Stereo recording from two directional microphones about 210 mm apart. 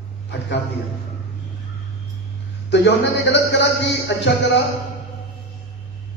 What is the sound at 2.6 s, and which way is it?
A man's voice, 55° left (ahead or behind).